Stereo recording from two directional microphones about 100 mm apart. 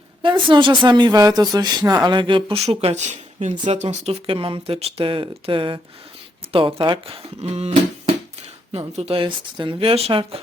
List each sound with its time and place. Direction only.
0.2 s speech: 55° right (ahead or behind)
2.0 s speech: 55° right (ahead or behind); by 2.9 s 70° right (ahead or behind)
3.7 s speech: 90° right
8.7 s speech: 75° right (ahead or behind)